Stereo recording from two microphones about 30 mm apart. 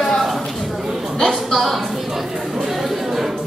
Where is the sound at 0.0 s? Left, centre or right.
Centre.